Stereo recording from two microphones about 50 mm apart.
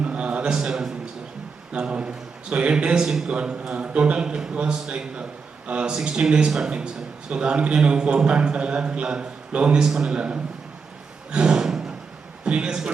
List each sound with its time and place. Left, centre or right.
0.0 s a sound: right
0.5 s a man's voice: centre
11.3 s snort: centre
12.5 s a man's voice: centre